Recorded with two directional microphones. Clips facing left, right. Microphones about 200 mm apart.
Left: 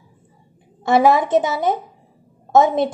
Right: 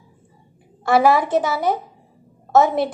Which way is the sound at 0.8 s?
20° left (ahead or behind).